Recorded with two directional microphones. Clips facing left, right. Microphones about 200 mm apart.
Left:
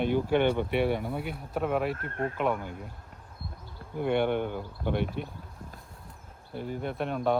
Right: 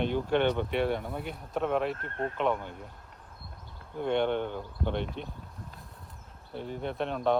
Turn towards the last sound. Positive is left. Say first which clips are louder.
# even
turn(degrees=5)  # may be behind; listen again after turning